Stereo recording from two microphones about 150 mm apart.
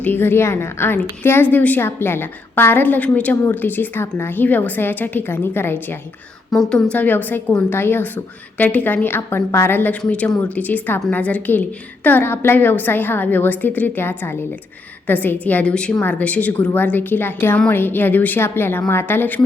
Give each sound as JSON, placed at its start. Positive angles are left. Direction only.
{"t": 0.0, "sound": "a woman's voice", "side_deg": 15}
{"t": 6.5, "sound": "a woman's voice", "side_deg": 0}